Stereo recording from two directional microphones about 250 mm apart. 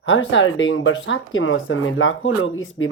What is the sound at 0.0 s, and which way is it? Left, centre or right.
Speech, left.